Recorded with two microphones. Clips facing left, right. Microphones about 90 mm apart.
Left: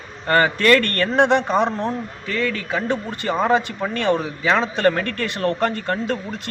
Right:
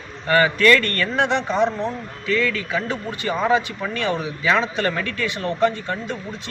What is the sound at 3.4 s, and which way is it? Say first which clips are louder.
A man's voice: left 1 dB; 45° left (ahead or behind).